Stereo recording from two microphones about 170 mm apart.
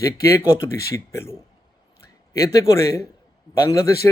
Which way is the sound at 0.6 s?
15° left (ahead or behind).